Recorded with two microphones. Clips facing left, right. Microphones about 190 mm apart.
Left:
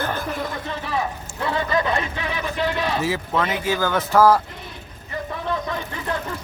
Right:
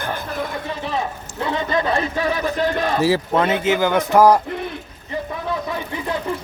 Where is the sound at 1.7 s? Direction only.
35° right (ahead or behind).